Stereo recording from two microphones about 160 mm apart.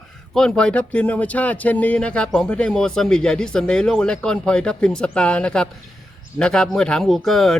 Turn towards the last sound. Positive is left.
turn(degrees=0)  # may be behind; listen again after turning